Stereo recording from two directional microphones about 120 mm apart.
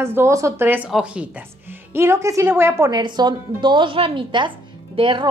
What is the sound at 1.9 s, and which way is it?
Speech, 20° right (ahead or behind).